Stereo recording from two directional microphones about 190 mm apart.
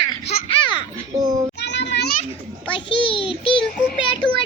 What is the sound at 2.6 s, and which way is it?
Child singing, 25° left (ahead or behind).